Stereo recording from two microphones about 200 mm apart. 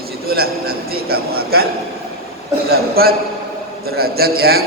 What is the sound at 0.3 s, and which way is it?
A man's voice, 50° right (ahead or behind).